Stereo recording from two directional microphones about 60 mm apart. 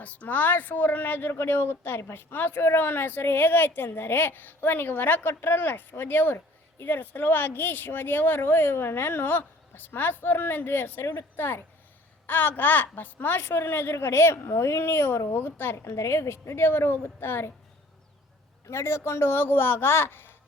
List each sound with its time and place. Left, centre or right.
0.0 s speech: left
16.0 s a woman's voice: left
18.7 s speech: left